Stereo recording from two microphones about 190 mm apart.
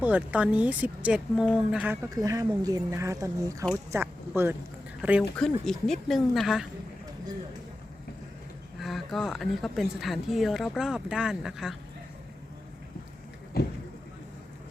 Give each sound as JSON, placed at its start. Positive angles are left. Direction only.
{"t": 0.0, "sound": "speech", "side_deg": -10}
{"t": 5.4, "sound": "speech", "side_deg": 0}
{"t": 8.8, "sound": "speech", "side_deg": 0}